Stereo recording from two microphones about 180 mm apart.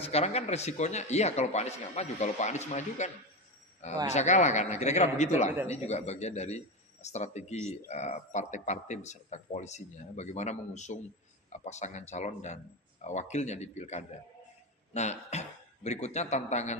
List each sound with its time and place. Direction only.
0.0 s speech: 35° left (ahead or behind)
4.1 s speech: 40° left (ahead or behind)